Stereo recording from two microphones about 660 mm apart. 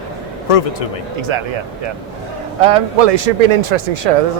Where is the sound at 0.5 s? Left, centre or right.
Left.